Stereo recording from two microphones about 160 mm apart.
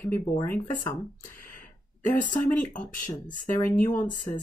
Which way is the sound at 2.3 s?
10° left (ahead or behind).